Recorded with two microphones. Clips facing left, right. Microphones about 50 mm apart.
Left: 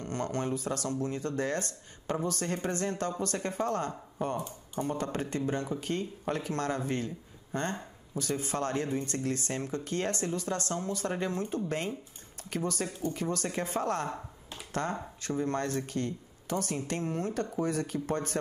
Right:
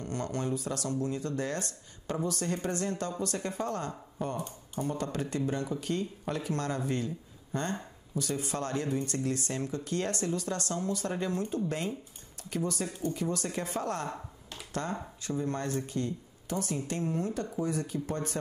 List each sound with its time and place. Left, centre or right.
0.0 s speech: left
8.2 s speech: left